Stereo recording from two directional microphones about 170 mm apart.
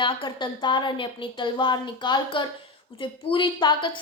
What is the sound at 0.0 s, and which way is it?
A child's voice, 30° left (ahead or behind).